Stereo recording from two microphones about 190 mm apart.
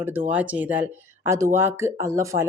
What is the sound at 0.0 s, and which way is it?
Speech, 10° right (ahead or behind).